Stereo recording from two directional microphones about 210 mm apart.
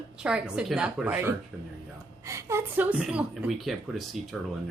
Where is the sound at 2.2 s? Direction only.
15° right (ahead or behind).